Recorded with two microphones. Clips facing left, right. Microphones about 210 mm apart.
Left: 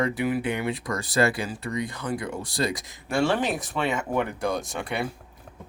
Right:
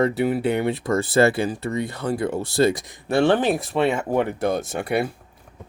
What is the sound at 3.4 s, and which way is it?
Speech, 35° right (ahead or behind).